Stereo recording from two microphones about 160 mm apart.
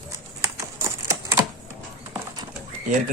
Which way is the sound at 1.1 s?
20° right (ahead or behind).